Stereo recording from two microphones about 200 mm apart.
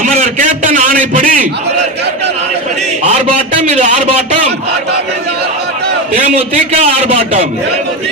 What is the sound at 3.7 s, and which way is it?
Speech, 40° right (ahead or behind).